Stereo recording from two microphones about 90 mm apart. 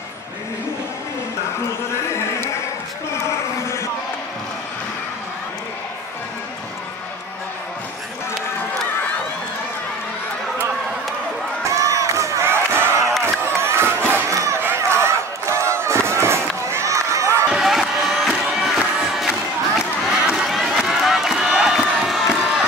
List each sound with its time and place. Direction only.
11.7 s battle cry: 35° right (ahead or behind)
13.2 s crowd: 25° right (ahead or behind)
14.8 s a sound: 30° right (ahead or behind)
17.5 s crowd: 5° right (ahead or behind)